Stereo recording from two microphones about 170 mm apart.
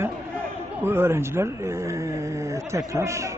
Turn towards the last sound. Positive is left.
turn(degrees=-15)  # may be behind; listen again after turning